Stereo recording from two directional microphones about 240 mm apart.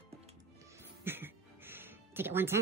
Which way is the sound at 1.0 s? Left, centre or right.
Centre.